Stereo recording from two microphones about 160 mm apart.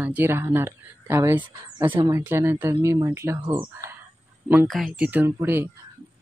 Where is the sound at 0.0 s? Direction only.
10° right (ahead or behind).